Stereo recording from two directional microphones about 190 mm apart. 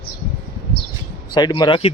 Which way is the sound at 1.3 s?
20° left (ahead or behind).